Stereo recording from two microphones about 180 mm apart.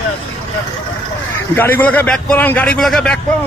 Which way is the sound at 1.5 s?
10° left (ahead or behind).